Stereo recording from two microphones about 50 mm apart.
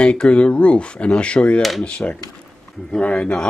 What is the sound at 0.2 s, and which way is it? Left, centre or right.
Speech, centre.